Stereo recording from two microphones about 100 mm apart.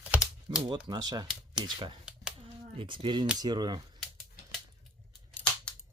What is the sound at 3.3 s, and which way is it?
Speech, 45° right (ahead or behind).